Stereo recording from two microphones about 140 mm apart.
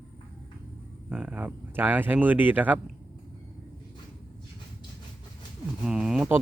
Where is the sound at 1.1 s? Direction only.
10° right (ahead or behind).